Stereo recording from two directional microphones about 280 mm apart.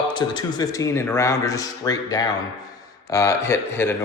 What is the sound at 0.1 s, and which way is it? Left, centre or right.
Speech, centre.